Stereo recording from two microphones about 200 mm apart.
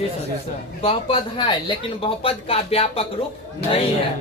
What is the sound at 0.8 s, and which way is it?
Speech, 25° left (ahead or behind).